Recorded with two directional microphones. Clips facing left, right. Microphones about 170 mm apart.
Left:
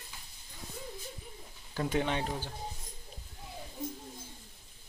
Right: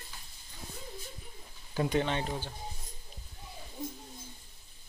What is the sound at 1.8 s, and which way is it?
Speech, 10° left (ahead or behind).